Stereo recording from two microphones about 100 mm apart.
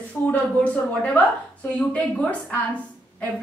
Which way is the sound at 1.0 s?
15° left (ahead or behind).